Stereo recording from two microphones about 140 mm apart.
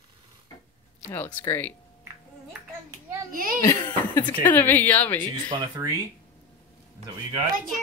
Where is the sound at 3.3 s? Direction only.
90° right.